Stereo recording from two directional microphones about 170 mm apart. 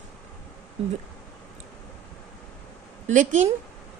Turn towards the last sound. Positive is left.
turn(degrees=-45)  # may be behind; listen again after turning